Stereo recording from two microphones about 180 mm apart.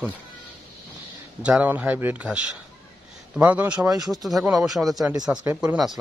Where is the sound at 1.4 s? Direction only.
5° right (ahead or behind).